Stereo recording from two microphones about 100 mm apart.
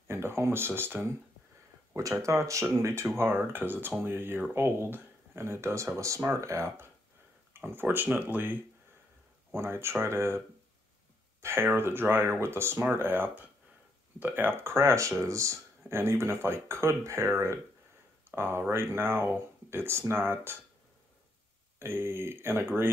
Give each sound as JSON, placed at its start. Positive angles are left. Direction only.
{"t": 0.1, "sound": "speech", "side_deg": -25}
{"t": 2.2, "sound": "speech", "side_deg": -30}
{"t": 9.6, "sound": "speech", "side_deg": -25}
{"t": 11.4, "sound": "speech", "side_deg": -25}
{"t": 21.7, "sound": "speech", "side_deg": -25}